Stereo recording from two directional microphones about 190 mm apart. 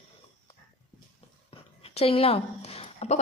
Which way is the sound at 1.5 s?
30° left (ahead or behind).